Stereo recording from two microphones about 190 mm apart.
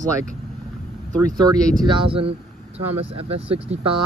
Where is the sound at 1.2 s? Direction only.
20° right (ahead or behind).